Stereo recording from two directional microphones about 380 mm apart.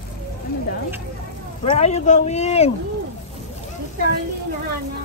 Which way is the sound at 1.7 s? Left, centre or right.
Centre.